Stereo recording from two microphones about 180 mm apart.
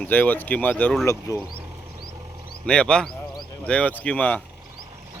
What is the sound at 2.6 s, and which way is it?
Speech, 5° left (ahead or behind).